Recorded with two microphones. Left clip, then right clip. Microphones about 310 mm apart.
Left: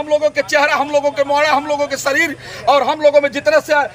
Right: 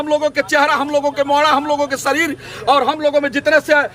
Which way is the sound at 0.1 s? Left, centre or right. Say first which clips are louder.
Left 1 dB; centre.